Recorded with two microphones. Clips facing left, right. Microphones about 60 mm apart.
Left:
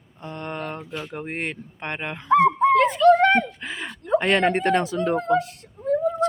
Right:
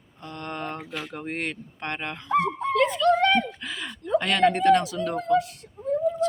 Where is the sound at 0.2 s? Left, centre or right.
Left.